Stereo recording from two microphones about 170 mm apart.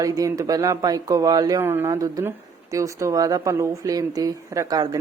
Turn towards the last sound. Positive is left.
turn(degrees=-20)  # may be behind; listen again after turning